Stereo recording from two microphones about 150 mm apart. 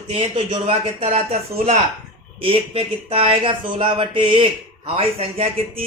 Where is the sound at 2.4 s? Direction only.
40° right (ahead or behind).